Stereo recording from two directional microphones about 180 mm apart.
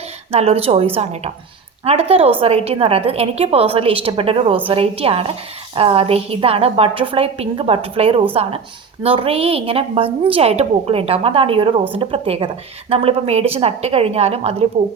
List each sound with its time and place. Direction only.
0.3 s a woman's voice: 35° right (ahead or behind)